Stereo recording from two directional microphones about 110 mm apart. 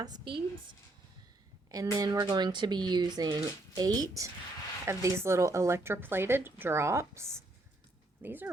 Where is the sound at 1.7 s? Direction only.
35° right (ahead or behind).